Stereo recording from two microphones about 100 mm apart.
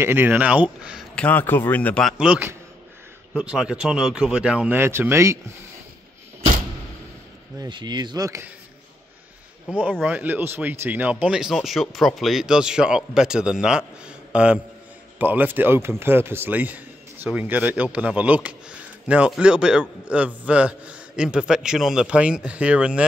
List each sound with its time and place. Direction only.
0.0 s a man's voice: 20° right (ahead or behind)
1.1 s speech: 15° left (ahead or behind)
2.1 s a man's voice: 10° right (ahead or behind)
4.7 s speech: 25° right (ahead or behind)
7.5 s speech: 45° right (ahead or behind)
9.7 s a man's voice: 15° right (ahead or behind)